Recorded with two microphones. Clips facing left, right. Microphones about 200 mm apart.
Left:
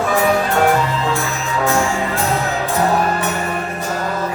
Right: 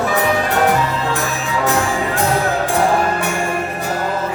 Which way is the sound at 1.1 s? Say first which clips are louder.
Even; 15° right (ahead or behind).